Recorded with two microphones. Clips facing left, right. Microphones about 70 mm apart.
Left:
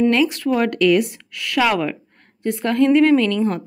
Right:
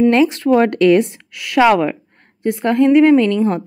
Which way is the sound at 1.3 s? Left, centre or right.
Centre.